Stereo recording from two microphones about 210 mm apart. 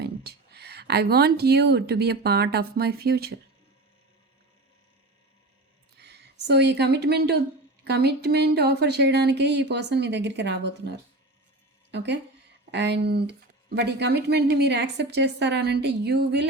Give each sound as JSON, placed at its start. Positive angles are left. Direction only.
{"t": 0.0, "sound": "speech", "side_deg": -50}
{"t": 6.0, "sound": "speech", "side_deg": -50}